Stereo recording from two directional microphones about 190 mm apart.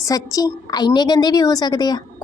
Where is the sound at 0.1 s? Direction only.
20° left (ahead or behind).